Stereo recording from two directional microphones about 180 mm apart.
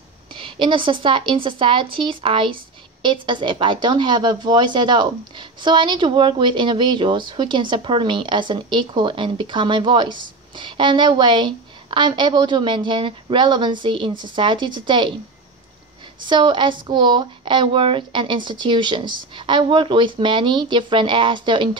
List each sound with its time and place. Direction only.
0.3 s speech: 30° right (ahead or behind)
16.3 s speech: 25° right (ahead or behind)